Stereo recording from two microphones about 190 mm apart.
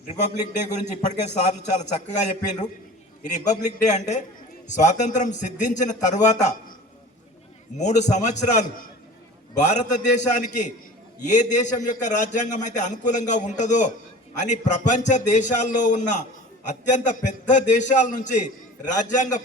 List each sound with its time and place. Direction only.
1.5 s a man's voice: 40° left (ahead or behind)
7.8 s a man's voice: 40° left (ahead or behind)